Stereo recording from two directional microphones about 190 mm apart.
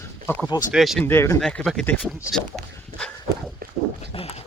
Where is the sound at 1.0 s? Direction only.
15° left (ahead or behind).